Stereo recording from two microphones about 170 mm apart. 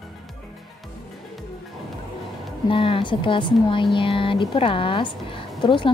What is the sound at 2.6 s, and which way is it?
A woman's voice, 30° left (ahead or behind).